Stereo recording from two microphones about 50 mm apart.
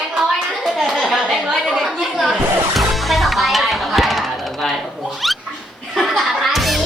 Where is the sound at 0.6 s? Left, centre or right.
Centre.